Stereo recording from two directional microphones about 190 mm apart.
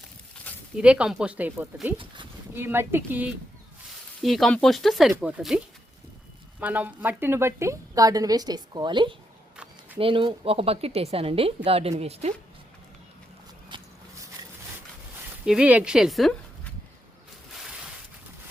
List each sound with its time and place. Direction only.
0.5 s a sound: 10° left (ahead or behind)
0.8 s a woman's voice: 5° right (ahead or behind); by 12.3 s 35° right (ahead or behind)
13.7 s walk: 25° right (ahead or behind)
15.4 s speech: 5° right (ahead or behind)